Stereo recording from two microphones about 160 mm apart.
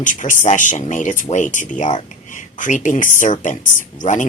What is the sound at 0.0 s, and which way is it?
Speech, 55° left (ahead or behind).